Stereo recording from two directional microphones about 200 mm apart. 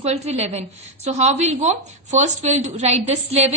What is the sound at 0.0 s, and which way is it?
A woman's voice, 30° right (ahead or behind).